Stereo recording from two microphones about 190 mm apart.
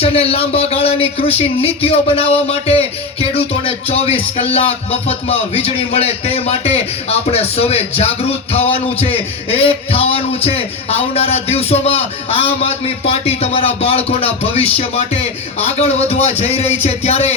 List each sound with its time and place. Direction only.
0.0 s a man's voice: 30° left (ahead or behind)